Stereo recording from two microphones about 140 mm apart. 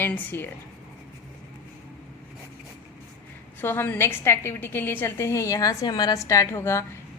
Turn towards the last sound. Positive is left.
turn(degrees=20)  # may be behind; listen again after turning